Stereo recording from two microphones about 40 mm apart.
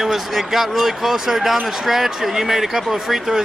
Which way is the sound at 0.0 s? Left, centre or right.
Centre.